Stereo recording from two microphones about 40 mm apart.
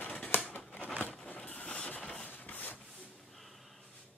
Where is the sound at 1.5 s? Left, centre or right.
Left.